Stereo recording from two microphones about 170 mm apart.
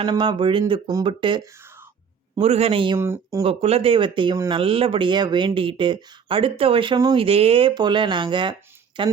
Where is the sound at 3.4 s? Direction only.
35° right (ahead or behind).